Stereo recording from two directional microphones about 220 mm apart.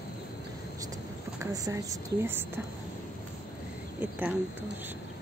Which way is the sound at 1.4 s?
15° right (ahead or behind).